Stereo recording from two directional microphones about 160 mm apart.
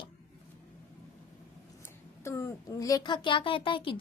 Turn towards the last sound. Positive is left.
turn(degrees=30)  # may be behind; listen again after turning